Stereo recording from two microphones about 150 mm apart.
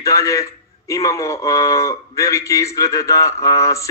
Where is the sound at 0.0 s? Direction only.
20° left (ahead or behind).